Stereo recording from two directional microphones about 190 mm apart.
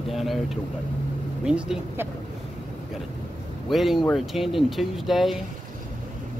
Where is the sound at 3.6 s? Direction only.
Centre (ahead or behind).